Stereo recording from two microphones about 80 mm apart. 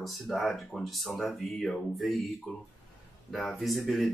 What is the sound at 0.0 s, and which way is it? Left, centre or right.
Speech, centre.